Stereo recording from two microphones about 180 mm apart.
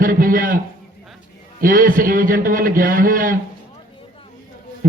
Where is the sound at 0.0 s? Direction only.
50° right (ahead or behind).